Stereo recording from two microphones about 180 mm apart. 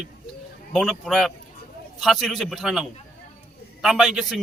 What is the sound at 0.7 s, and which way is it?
Speech, centre (ahead or behind).